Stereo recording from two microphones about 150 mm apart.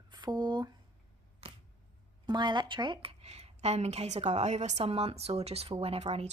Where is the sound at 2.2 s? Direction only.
30° right (ahead or behind).